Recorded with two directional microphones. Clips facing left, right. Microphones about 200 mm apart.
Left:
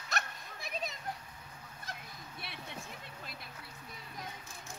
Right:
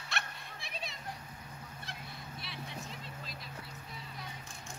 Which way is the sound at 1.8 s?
50° left (ahead or behind).